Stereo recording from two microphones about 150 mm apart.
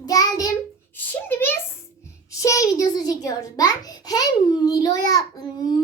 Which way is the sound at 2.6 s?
25° left (ahead or behind).